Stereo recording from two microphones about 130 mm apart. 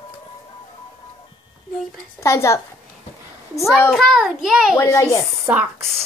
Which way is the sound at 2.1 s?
20° left (ahead or behind).